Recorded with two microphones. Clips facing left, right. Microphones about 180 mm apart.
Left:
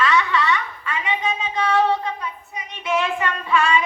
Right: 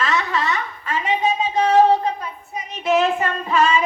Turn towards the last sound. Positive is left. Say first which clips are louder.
# right 2 dB
turn(degrees=-40)  # may be behind; listen again after turning